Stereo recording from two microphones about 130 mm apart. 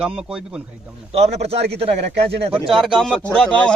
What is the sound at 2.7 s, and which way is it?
A man's voice, centre (ahead or behind).